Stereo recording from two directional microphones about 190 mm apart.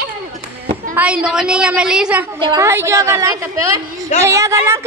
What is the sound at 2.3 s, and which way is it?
Speech, 25° right (ahead or behind).